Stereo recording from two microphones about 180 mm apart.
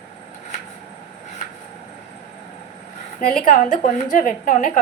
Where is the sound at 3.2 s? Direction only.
50° left (ahead or behind).